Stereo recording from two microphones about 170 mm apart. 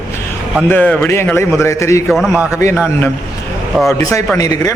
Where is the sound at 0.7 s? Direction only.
10° left (ahead or behind).